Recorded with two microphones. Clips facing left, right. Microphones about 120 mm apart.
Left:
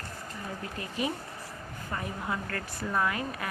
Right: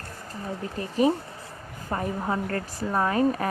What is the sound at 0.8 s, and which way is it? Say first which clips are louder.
Speech: right 11 dB; 35° right (ahead or behind).